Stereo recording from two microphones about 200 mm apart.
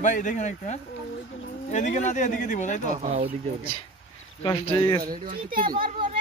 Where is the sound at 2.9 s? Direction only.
35° right (ahead or behind).